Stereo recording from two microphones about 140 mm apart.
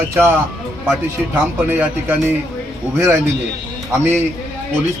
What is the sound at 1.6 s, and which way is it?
Speech, 15° right (ahead or behind).